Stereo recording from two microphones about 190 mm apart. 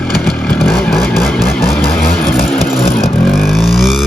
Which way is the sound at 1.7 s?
5° left (ahead or behind).